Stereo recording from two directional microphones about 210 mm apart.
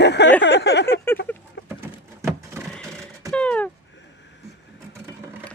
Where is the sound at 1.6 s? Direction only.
60° left (ahead or behind).